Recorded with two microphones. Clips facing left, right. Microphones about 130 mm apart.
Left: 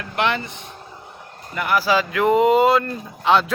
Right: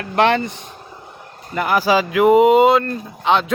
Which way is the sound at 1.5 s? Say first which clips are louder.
Right 3 dB; 30° right (ahead or behind).